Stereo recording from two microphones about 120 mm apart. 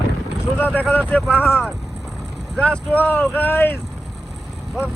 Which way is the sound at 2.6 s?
10° left (ahead or behind).